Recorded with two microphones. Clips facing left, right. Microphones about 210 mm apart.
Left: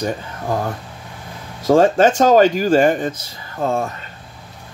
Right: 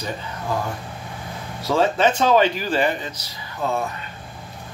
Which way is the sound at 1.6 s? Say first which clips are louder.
Left 6 dB; 50° left (ahead or behind).